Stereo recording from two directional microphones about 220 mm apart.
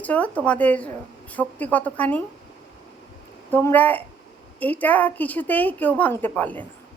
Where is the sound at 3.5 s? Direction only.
10° left (ahead or behind).